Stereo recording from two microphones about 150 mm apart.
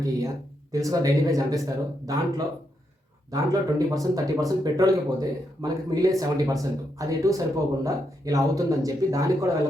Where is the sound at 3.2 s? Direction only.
25° right (ahead or behind).